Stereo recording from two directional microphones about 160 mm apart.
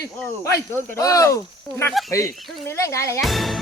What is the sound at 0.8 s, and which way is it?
Speech, 15° left (ahead or behind).